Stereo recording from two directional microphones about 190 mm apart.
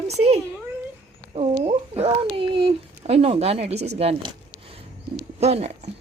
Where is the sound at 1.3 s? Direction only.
30° right (ahead or behind).